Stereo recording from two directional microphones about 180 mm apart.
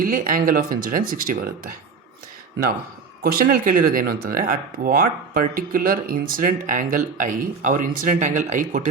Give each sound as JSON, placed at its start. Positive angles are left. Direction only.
{"t": 0.0, "sound": "speech", "side_deg": -50}
{"t": 3.2, "sound": "speech", "side_deg": -55}